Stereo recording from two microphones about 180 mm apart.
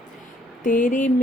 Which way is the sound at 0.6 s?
45° left (ahead or behind).